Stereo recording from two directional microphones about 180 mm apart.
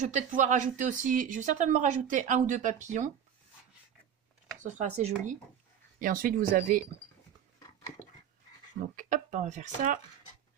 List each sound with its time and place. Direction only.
0.0 s speech: 45° right (ahead or behind)
4.6 s speech: 40° right (ahead or behind)
8.9 s speech: 45° right (ahead or behind)